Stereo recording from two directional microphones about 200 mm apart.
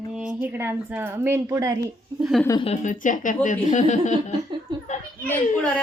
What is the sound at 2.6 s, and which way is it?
Speech, 35° left (ahead or behind).